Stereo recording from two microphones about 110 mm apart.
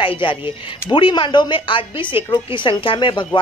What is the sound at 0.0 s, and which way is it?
A woman's voice, 50° left (ahead or behind).